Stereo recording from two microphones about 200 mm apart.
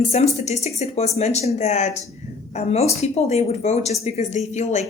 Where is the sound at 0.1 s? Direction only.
35° left (ahead or behind).